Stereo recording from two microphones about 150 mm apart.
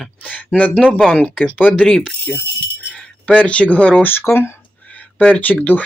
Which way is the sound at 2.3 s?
10° right (ahead or behind).